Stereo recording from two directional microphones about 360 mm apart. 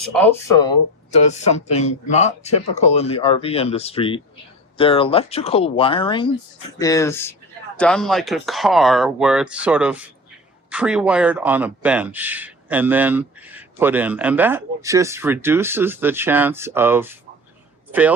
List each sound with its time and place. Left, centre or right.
0.0 s a man's voice: centre